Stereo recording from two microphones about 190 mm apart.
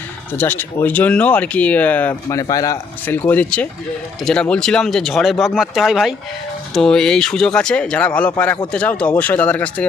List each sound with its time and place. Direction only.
0.3 s speech: 10° left (ahead or behind)